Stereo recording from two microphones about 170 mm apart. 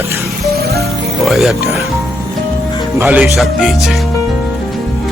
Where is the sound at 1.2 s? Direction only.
Centre (ahead or behind).